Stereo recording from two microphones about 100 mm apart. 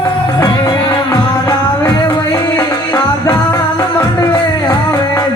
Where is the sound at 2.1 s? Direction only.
40° left (ahead or behind).